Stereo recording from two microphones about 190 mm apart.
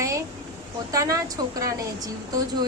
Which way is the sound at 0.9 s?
15° right (ahead or behind).